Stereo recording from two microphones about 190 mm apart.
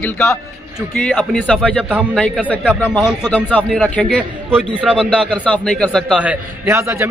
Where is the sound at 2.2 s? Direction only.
5° left (ahead or behind).